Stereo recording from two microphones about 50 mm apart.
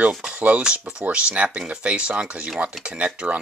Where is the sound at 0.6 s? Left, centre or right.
Centre.